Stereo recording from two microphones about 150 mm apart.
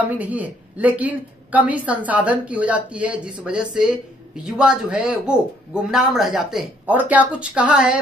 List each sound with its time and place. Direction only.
0.1 s speech: 10° right (ahead or behind)